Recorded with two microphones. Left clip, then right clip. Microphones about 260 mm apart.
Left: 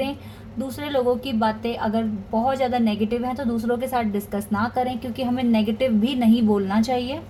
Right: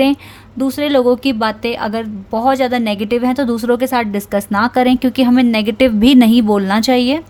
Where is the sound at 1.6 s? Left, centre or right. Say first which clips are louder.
Right 6 dB; right.